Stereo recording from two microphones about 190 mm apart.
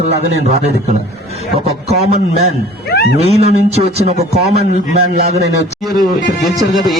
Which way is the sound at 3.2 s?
35° right (ahead or behind).